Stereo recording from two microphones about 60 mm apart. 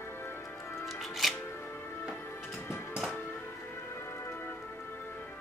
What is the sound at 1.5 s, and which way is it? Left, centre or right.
Music, left.